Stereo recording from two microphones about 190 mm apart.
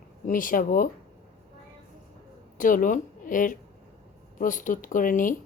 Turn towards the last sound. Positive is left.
turn(degrees=45)  # may be behind; listen again after turning